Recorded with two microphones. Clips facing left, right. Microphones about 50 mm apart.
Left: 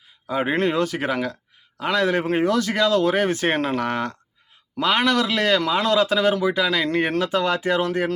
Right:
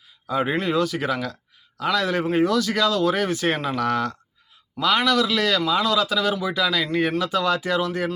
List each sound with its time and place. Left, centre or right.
0.3 s a man's voice: left
0.5 s a man's voice: left